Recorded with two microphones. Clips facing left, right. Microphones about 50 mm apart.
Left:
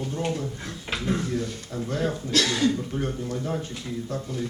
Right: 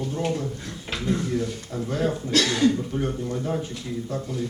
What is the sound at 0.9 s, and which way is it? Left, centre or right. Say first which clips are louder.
Speech: left 1 dB; centre.